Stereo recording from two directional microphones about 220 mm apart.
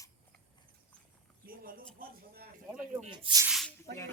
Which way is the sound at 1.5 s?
40° right (ahead or behind).